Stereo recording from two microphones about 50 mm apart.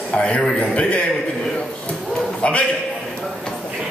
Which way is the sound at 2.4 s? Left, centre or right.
Left.